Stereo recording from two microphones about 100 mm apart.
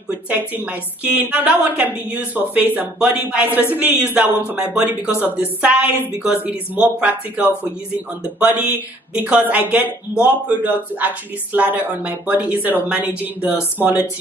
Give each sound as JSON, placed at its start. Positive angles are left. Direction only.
{"t": 0.3, "sound": "a woman's voice", "side_deg": -20}